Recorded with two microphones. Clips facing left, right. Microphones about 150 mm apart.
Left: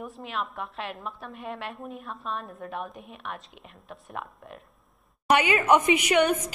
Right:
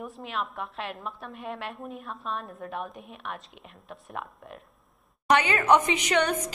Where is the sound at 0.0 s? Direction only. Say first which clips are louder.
Even; centre (ahead or behind).